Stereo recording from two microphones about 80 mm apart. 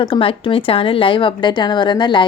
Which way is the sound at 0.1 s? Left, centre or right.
Left.